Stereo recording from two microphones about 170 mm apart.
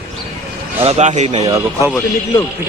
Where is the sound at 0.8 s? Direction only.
40° right (ahead or behind).